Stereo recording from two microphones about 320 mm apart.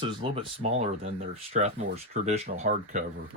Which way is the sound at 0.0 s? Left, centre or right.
Centre.